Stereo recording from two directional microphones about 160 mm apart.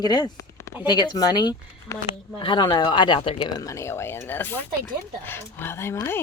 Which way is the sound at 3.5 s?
20° left (ahead or behind).